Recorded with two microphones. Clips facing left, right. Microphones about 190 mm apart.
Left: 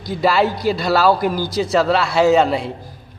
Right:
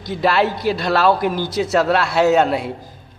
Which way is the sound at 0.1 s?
Centre (ahead or behind).